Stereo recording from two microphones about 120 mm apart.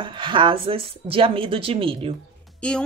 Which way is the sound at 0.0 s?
45° right (ahead or behind).